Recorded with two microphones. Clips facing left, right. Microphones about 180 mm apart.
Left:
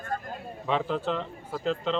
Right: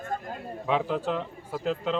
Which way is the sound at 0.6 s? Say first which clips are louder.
Right 1 dB; 10° right (ahead or behind).